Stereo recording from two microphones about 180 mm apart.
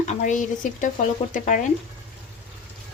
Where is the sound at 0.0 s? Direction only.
45° left (ahead or behind).